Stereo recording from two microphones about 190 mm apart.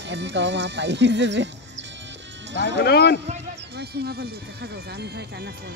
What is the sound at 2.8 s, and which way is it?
Speech, 55° left (ahead or behind).